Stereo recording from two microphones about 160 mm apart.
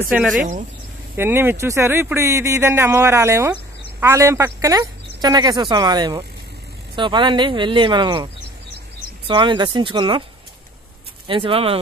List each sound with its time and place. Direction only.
0.1 s speech: centre (ahead or behind)
1.1 s speech: 15° right (ahead or behind); by 8.3 s 30° right (ahead or behind)
9.3 s speech: 30° right (ahead or behind)
11.2 s speech: 35° right (ahead or behind)